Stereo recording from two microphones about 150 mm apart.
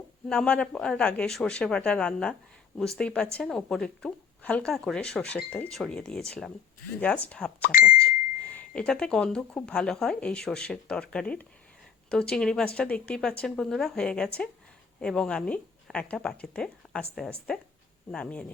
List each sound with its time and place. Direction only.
0.3 s speech: 5° left (ahead or behind)
7.6 s speech: 70° left (ahead or behind)
8.5 s speech: 10° left (ahead or behind)